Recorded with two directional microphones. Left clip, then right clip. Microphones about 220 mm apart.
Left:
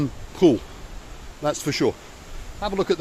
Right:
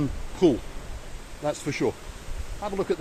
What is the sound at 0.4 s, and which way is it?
Speech, 30° left (ahead or behind).